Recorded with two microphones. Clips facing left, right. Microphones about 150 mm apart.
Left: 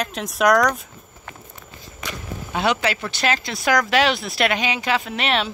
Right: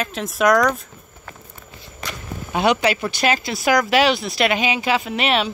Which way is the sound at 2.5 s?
15° right (ahead or behind).